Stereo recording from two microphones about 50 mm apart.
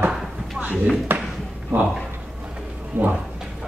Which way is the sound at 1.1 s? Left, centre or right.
Right.